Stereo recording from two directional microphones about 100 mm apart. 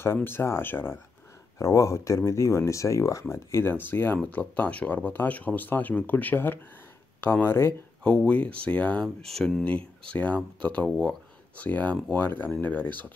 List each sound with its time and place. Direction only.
0.0 s speech: 25° left (ahead or behind)
8.0 s speech: 10° left (ahead or behind)